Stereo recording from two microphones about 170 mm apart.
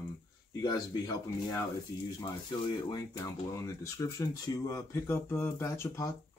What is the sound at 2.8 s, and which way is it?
Speech, 20° left (ahead or behind).